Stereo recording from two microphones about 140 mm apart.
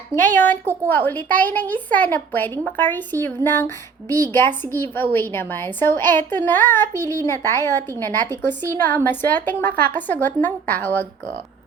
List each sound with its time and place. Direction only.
0.1 s a woman's voice: 15° left (ahead or behind)
0.6 s a woman's voice: 15° right (ahead or behind)
0.9 s a woman's voice: 15° left (ahead or behind)